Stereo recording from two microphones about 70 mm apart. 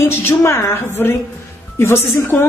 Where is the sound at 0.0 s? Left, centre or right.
Left.